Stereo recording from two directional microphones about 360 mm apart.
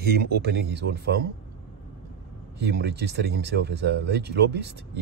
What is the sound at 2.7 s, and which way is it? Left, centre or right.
Speech, right.